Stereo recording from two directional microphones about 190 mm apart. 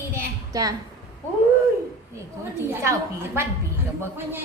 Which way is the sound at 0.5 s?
20° right (ahead or behind).